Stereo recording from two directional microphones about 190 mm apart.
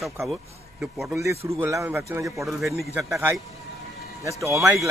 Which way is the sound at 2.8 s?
15° right (ahead or behind).